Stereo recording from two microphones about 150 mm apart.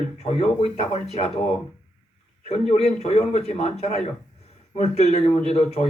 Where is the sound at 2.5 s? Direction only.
45° left (ahead or behind).